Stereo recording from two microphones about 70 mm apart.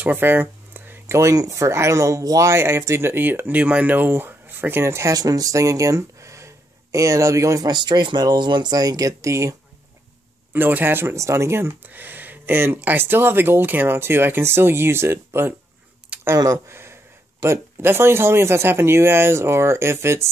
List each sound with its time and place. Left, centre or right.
0.0 s a sound: right
1.1 s speech: right
5.1 s speech: right
7.6 s speech: right
10.5 s speech: right
11.1 s speech: right
11.8 s speech: right
16.1 s a sound: centre
16.6 s speech: right